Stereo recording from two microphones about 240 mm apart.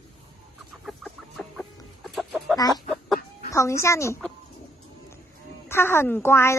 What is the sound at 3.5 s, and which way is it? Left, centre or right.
Speech, centre.